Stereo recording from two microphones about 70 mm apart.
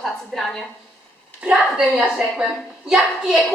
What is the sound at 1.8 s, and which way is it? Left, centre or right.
A child's voice, centre.